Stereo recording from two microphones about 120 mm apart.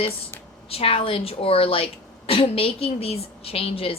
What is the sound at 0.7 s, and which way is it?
A woman's voice, 55° left (ahead or behind).